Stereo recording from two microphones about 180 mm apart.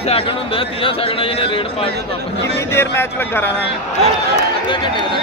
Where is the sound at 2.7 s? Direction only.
10° left (ahead or behind).